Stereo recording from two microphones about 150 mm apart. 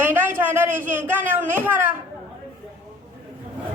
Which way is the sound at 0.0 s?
15° right (ahead or behind).